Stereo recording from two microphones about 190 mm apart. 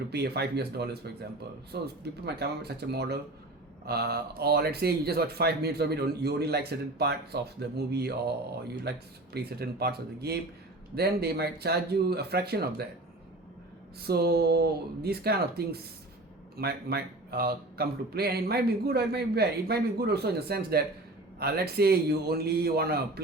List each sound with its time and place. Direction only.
0.1 s speech: 60° right (ahead or behind)
14.0 s speech: 55° right (ahead or behind)